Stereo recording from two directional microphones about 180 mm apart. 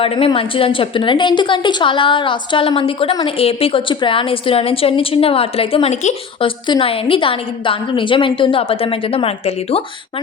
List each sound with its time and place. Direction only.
0.0 s a woman's voice: 30° left (ahead or behind)